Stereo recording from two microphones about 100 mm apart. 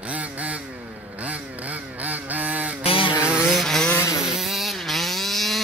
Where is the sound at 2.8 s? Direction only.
65° left (ahead or behind).